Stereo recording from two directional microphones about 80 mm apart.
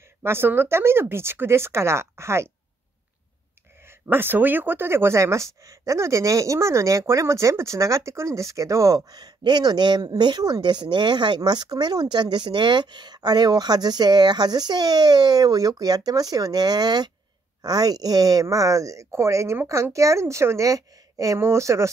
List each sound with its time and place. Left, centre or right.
0.2 s speech: right
3.8 s speech: right